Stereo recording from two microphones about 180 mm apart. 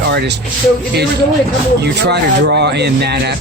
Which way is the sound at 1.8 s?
70° right (ahead or behind).